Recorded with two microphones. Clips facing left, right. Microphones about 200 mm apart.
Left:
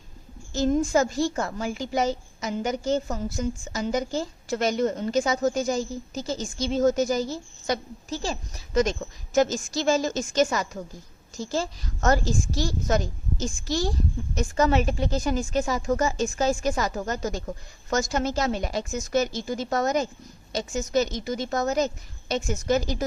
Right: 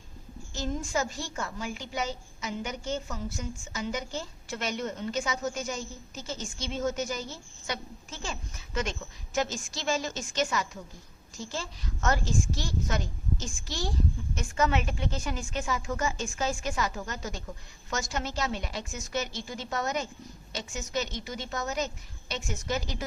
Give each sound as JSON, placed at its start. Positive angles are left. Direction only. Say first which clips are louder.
{"t": 0.5, "sound": "a woman's voice", "louder": "left 10 dB", "side_deg": 40}